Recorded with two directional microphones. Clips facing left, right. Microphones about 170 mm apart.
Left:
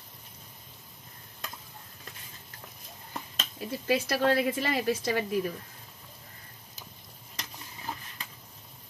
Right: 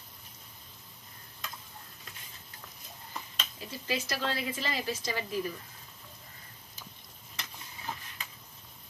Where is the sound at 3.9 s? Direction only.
55° left (ahead or behind).